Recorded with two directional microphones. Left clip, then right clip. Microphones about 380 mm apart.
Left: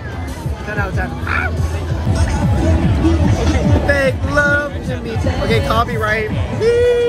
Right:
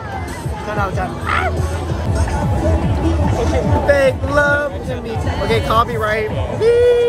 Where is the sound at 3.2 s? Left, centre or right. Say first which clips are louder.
Right 1 dB; right.